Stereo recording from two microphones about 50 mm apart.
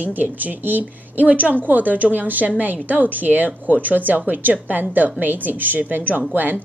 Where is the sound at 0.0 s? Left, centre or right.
Right.